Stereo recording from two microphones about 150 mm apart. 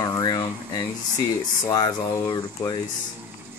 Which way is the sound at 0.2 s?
25° left (ahead or behind).